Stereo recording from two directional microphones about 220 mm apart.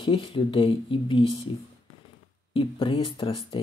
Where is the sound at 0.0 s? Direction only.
25° left (ahead or behind).